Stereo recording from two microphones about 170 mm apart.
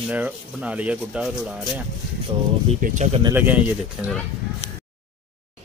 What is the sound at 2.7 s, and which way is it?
Speech, 55° right (ahead or behind).